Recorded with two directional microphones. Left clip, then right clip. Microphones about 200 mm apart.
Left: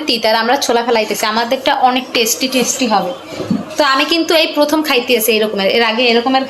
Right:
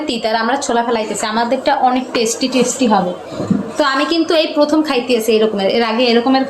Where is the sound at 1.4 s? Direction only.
Centre (ahead or behind).